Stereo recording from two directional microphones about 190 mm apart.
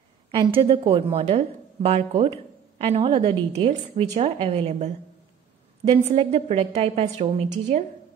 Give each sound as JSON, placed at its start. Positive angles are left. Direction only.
{"t": 0.3, "sound": "a woman's voice", "side_deg": -30}